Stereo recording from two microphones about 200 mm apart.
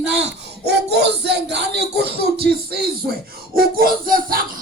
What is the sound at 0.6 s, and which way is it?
Speech, 55° right (ahead or behind).